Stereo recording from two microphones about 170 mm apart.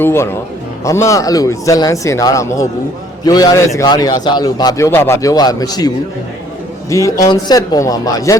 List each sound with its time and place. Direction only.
0.0 s speech: 15° left (ahead or behind)
6.9 s speech: 20° left (ahead or behind)